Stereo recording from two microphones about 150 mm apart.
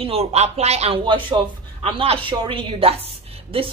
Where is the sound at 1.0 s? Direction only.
30° right (ahead or behind).